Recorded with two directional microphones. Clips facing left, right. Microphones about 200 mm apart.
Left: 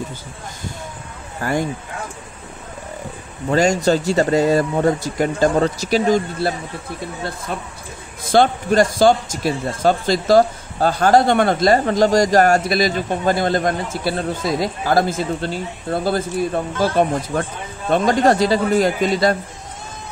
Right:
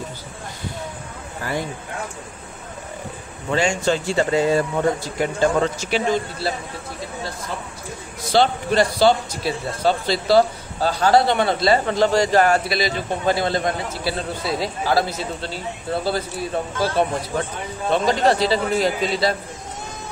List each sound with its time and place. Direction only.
1.4 s speech: 50° left (ahead or behind)
3.4 s speech: 40° left (ahead or behind)
8.2 s speech: 50° left (ahead or behind)